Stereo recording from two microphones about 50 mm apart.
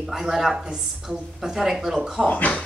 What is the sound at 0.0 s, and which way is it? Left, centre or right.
Speech, centre.